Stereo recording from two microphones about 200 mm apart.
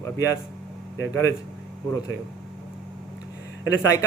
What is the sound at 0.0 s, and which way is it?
Speech, 15° left (ahead or behind).